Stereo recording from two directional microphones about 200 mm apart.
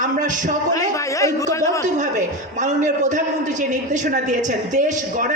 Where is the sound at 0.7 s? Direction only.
15° left (ahead or behind).